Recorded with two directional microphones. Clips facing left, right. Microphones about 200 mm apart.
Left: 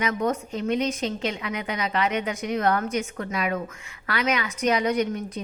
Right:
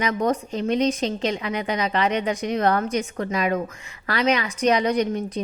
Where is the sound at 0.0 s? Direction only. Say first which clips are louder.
Right 3 dB; 35° right (ahead or behind).